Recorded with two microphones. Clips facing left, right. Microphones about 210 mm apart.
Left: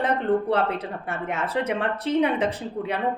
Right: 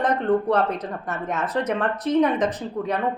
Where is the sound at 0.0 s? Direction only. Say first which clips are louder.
Right 2 dB; 10° left (ahead or behind).